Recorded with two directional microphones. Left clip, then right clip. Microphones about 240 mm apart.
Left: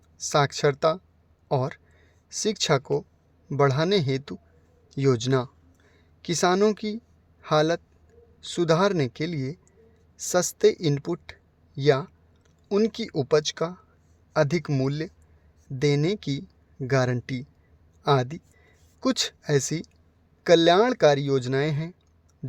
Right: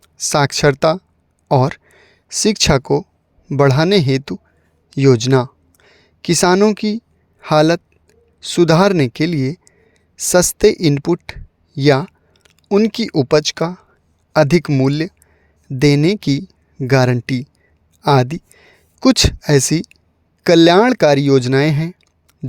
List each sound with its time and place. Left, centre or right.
0.0 s speech: right